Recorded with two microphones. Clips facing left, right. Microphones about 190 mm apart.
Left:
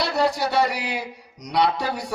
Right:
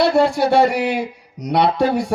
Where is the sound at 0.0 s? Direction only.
50° right (ahead or behind).